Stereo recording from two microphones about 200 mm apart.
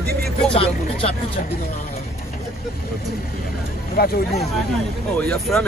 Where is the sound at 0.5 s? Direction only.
30° left (ahead or behind).